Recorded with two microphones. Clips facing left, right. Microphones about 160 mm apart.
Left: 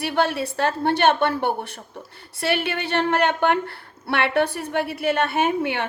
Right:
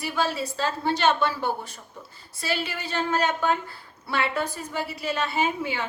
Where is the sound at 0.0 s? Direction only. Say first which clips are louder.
Left 5 dB; 60° left (ahead or behind).